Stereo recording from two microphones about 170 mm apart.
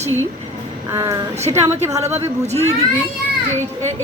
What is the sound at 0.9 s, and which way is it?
Speech, 15° right (ahead or behind).